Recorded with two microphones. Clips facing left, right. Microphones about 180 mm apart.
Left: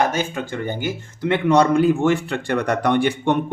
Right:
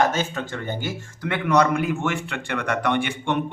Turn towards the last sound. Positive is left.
turn(degrees=40)  # may be behind; listen again after turning